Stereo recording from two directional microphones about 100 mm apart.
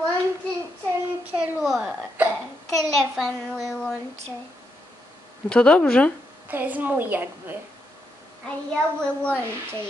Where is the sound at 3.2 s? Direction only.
Centre (ahead or behind).